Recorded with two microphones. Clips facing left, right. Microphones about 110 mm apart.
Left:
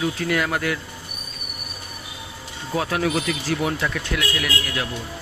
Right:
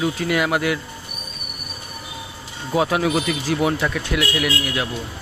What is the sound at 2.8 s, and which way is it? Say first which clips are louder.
Speech: right 4 dB; 15° right (ahead or behind).